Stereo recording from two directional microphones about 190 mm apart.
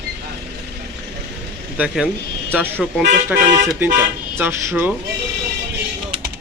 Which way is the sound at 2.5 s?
10° right (ahead or behind).